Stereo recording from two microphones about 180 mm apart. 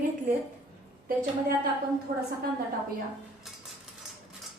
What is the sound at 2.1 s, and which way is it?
Speech, 50° right (ahead or behind).